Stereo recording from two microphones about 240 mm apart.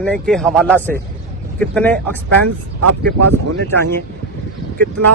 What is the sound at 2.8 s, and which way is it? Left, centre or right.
Speech, right.